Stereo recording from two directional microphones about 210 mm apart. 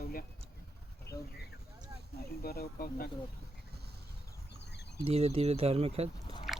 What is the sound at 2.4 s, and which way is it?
Speech, 45° left (ahead or behind).